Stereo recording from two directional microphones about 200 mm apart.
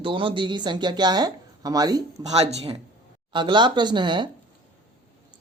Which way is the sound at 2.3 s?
30° right (ahead or behind).